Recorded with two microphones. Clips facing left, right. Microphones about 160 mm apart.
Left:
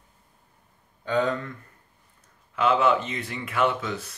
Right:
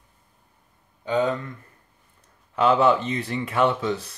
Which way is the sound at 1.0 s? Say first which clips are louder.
Right 2 dB; 20° right (ahead or behind).